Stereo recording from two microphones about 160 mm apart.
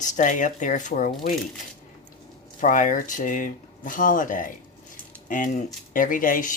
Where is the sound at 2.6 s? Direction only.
55° left (ahead or behind).